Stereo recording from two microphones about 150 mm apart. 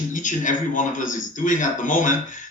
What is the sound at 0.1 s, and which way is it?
Speech, 55° left (ahead or behind).